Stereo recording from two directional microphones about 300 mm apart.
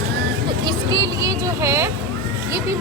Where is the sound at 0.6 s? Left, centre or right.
Centre.